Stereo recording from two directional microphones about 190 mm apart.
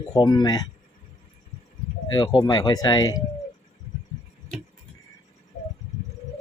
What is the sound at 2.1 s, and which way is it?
Speech, 20° left (ahead or behind).